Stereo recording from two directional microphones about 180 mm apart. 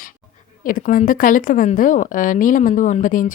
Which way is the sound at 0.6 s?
50° left (ahead or behind).